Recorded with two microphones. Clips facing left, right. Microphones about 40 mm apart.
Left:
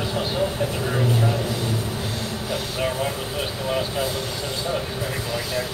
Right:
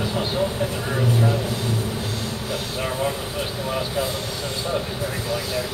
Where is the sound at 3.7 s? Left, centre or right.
Centre.